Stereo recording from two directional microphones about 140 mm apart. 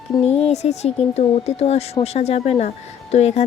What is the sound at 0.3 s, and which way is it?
Speech, 50° left (ahead or behind).